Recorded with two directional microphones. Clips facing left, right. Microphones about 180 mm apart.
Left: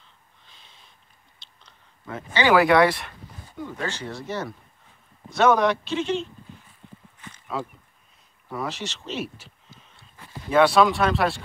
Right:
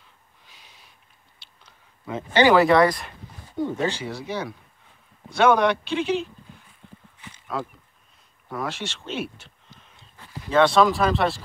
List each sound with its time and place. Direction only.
1.4 s a sound: 10° right (ahead or behind)
2.5 s speech: 5° left (ahead or behind)
3.5 s speech: 30° right (ahead or behind)
3.8 s speech: 10° right (ahead or behind)
4.1 s speech: centre (ahead or behind)